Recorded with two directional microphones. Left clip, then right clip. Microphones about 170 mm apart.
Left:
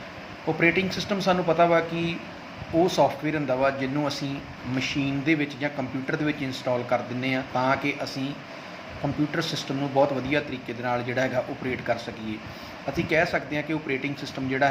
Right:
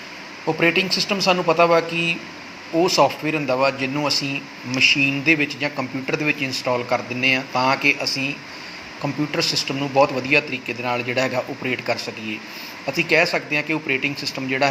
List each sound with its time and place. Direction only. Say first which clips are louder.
0.4 s speech: right 4 dB; 5° right (ahead or behind)
9.4 s speech: right 7 dB; centre (ahead or behind)